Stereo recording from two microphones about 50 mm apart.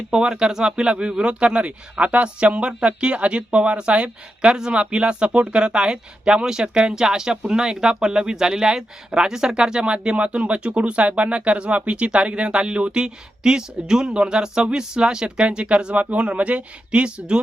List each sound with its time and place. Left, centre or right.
0.1 s speech: centre